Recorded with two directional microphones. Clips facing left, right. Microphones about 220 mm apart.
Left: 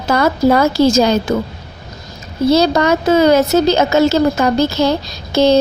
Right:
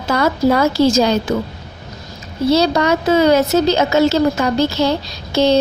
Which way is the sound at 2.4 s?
45° left (ahead or behind).